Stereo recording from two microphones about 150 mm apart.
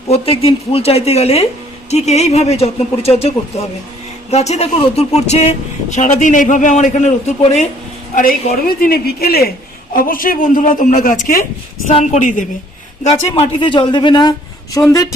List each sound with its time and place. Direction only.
0.1 s speech: 40° left (ahead or behind)
8.1 s a woman's voice: 65° left (ahead or behind); by 9.5 s 90° left
9.9 s speech: 70° left (ahead or behind)
11.9 s speech: 50° left (ahead or behind)
13.3 s speech: 40° left (ahead or behind); by 15.1 s 20° left (ahead or behind)